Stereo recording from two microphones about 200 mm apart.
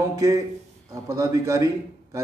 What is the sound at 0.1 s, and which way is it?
A man's voice, 15° right (ahead or behind).